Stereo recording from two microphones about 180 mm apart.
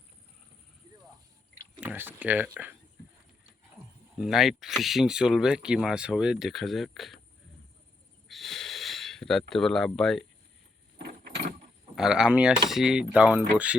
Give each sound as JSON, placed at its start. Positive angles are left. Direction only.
{"t": 1.8, "sound": "speech", "side_deg": -10}
{"t": 4.1, "sound": "speech", "side_deg": 0}
{"t": 8.3, "sound": "a sound", "side_deg": 0}
{"t": 10.9, "sound": "vehicle", "side_deg": -65}
{"t": 11.9, "sound": "speech", "side_deg": -5}